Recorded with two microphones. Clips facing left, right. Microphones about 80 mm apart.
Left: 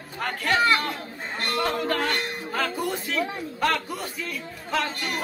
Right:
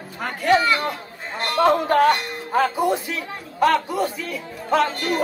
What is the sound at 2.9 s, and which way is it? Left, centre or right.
Speech, centre.